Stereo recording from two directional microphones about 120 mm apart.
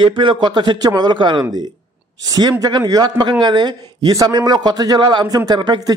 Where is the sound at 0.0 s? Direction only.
45° right (ahead or behind).